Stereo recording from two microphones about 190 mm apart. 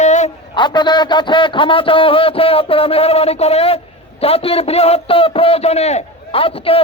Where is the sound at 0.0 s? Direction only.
40° left (ahead or behind).